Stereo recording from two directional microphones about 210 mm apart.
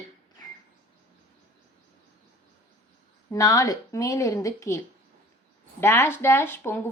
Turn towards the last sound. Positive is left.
turn(degrees=10)  # may be behind; listen again after turning